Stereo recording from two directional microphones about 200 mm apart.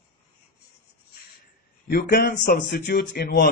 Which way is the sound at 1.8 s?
45° left (ahead or behind).